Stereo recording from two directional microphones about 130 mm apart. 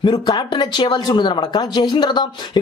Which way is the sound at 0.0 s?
35° left (ahead or behind).